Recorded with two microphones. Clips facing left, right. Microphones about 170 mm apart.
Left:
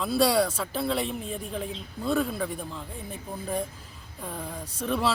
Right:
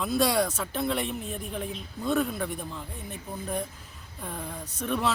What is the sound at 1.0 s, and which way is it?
Speech, 5° right (ahead or behind).